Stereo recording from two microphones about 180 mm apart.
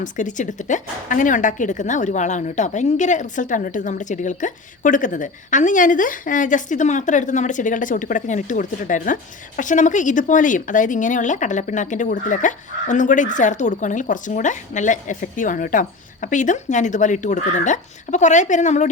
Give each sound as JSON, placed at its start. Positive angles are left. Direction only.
{"t": 0.0, "sound": "speech", "side_deg": 45}